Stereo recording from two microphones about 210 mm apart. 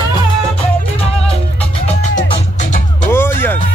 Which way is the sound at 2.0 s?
35° left (ahead or behind).